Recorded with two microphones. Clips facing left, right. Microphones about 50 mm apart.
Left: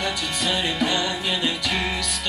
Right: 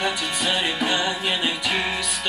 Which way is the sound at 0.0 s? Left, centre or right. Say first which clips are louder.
Right 1 dB; centre.